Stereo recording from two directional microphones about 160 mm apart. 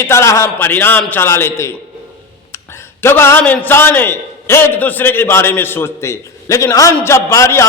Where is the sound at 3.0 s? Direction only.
15° left (ahead or behind).